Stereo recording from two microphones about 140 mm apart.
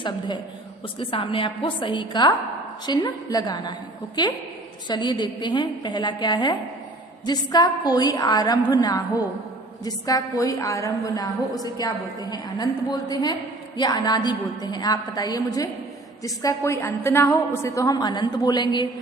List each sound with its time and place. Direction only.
0.9 s a woman's voice: 40° left (ahead or behind)